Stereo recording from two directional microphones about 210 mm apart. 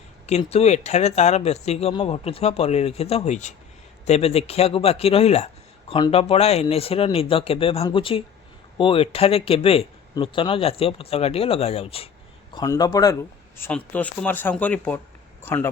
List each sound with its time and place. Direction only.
0.3 s speech: 30° left (ahead or behind)
12.5 s speech: 15° left (ahead or behind)
13.6 s speech: 5° left (ahead or behind)